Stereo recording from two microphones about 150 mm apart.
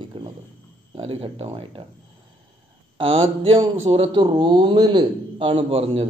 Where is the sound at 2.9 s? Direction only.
35° right (ahead or behind).